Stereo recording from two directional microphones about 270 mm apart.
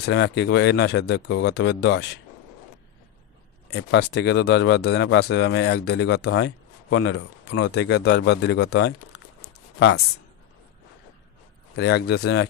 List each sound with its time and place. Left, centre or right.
0.0 s speech: left
3.7 s speech: left
11.7 s speech: left